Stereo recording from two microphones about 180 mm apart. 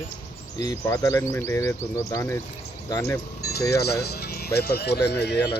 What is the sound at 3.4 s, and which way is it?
Vehicle, 60° left (ahead or behind).